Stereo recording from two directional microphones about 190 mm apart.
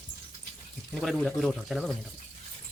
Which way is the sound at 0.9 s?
Centre (ahead or behind).